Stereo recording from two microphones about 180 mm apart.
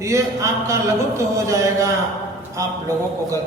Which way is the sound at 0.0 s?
15° right (ahead or behind).